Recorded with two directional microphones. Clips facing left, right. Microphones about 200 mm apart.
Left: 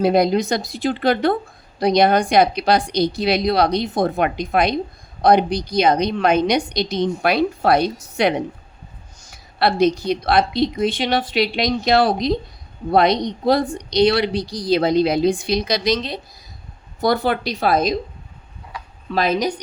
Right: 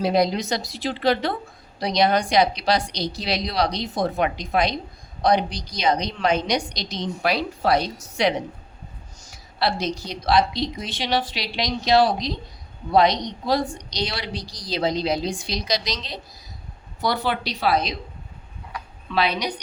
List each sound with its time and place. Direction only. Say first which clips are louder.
0.0 s speech: left 5 dB; 55° left (ahead or behind)
19.0 s speech: left 4 dB; 45° left (ahead or behind)